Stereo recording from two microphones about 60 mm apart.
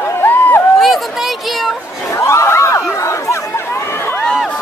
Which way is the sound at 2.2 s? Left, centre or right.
Left.